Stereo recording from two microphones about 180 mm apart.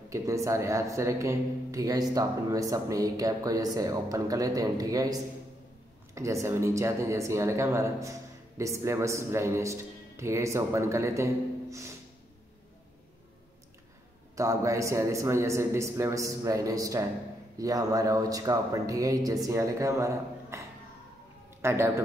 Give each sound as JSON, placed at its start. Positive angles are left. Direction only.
{"t": 0.1, "sound": "speech", "side_deg": -15}
{"t": 14.3, "sound": "a man's voice", "side_deg": -15}